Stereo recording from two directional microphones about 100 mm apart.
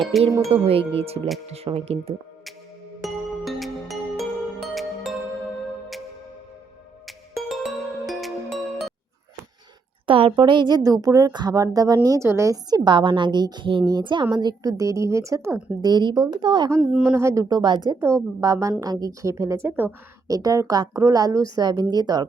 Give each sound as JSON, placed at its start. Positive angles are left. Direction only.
{"t": 0.1, "sound": "speech", "side_deg": 0}
{"t": 0.5, "sound": "music", "side_deg": -75}
{"t": 3.0, "sound": "music", "side_deg": 0}
{"t": 7.3, "sound": "music", "side_deg": 0}
{"t": 10.1, "sound": "speech", "side_deg": -60}
{"t": 10.8, "sound": "speech", "side_deg": -35}
{"t": 12.8, "sound": "a woman's voice", "side_deg": -50}
{"t": 14.3, "sound": "speech", "side_deg": -40}
{"t": 15.8, "sound": "a woman's voice", "side_deg": -45}
{"t": 17.0, "sound": "speech", "side_deg": -30}
{"t": 17.6, "sound": "a woman's voice", "side_deg": -45}
{"t": 18.0, "sound": "speech", "side_deg": -30}
{"t": 20.2, "sound": "speech", "side_deg": -35}